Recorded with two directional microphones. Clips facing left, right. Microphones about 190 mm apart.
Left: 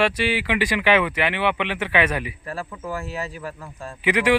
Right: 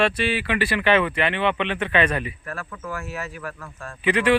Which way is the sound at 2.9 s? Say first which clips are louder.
Left 2 dB; 35° left (ahead or behind).